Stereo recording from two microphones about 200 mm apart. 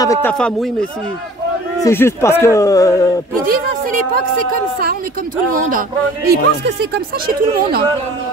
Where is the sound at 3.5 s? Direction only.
45° right (ahead or behind).